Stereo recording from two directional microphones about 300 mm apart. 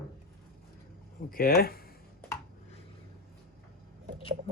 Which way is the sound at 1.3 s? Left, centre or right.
Left.